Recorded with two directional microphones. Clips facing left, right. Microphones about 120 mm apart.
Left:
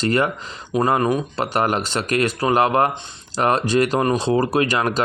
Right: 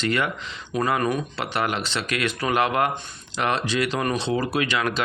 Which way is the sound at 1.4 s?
45° left (ahead or behind).